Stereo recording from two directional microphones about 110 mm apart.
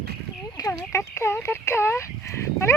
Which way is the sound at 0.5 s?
30° left (ahead or behind).